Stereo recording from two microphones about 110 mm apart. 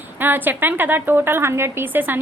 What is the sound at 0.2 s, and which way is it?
A woman's voice, 20° right (ahead or behind).